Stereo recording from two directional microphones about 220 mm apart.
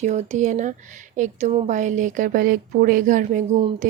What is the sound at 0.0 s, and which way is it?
Speech, 30° right (ahead or behind).